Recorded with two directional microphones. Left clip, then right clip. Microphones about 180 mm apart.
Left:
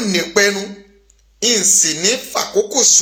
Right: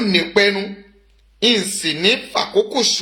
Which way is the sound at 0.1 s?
15° right (ahead or behind).